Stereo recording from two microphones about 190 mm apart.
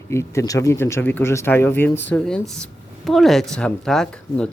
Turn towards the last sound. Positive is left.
turn(degrees=5)  # may be behind; listen again after turning